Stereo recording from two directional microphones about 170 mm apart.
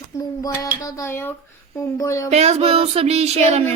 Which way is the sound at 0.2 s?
20° left (ahead or behind).